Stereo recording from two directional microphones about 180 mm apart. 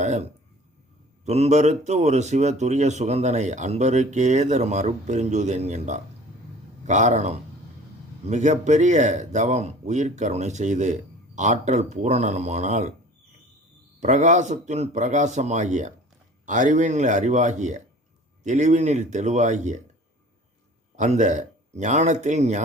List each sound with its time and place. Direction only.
0.0 s speech: 40° right (ahead or behind)
14.0 s speech: 40° right (ahead or behind)
20.9 s speech: 40° right (ahead or behind)